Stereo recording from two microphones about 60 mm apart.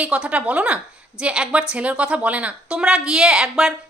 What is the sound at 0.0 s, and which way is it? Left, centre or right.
A woman's voice, centre.